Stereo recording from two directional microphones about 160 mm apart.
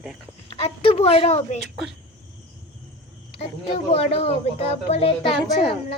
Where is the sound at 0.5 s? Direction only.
40° left (ahead or behind).